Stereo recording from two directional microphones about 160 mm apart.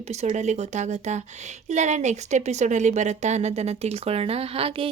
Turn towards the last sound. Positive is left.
turn(degrees=-35)  # may be behind; listen again after turning